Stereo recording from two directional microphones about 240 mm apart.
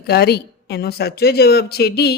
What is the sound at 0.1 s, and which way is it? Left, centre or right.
Speech, left.